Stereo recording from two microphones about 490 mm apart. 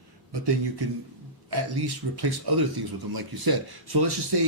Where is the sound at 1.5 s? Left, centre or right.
Right.